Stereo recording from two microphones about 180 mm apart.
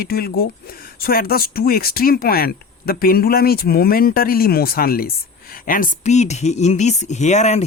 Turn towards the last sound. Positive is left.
turn(degrees=40)  # may be behind; listen again after turning